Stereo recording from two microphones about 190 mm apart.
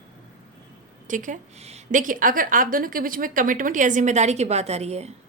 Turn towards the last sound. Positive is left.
turn(degrees=-35)  # may be behind; listen again after turning